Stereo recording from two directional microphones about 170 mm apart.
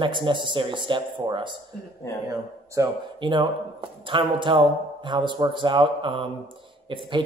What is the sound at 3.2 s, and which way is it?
Speech, 30° right (ahead or behind).